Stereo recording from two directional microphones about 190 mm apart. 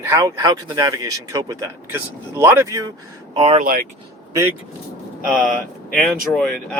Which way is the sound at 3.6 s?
50° right (ahead or behind).